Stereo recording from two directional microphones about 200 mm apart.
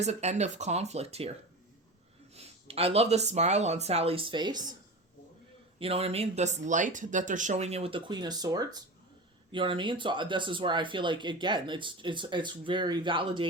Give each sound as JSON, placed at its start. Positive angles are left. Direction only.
{"t": 0.0, "sound": "speech", "side_deg": -35}
{"t": 2.3, "sound": "speech", "side_deg": -30}
{"t": 5.8, "sound": "speech", "side_deg": -30}